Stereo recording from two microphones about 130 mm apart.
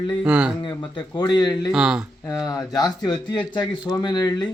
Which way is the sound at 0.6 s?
35° left (ahead or behind).